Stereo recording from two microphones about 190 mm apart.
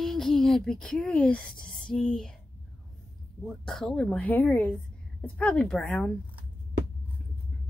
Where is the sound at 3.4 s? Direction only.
Centre (ahead or behind).